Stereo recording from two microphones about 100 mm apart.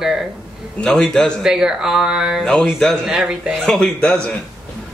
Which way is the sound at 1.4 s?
5° right (ahead or behind).